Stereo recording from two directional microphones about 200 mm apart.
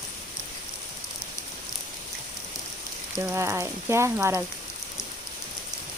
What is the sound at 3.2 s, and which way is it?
Frying, 15° right (ahead or behind).